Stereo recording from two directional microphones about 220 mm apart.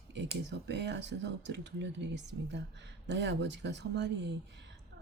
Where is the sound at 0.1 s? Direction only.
50° right (ahead or behind).